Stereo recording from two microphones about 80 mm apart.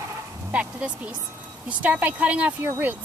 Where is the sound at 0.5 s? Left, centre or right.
Centre.